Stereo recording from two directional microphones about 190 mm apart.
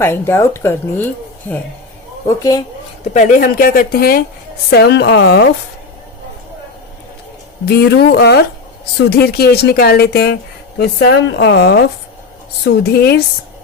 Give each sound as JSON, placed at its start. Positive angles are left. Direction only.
{"t": 0.0, "sound": "a woman's voice", "side_deg": 10}
{"t": 3.0, "sound": "speech", "side_deg": 40}
{"t": 7.6, "sound": "speech", "side_deg": 60}